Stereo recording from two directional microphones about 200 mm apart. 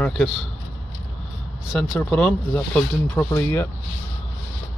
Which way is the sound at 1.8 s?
5° left (ahead or behind).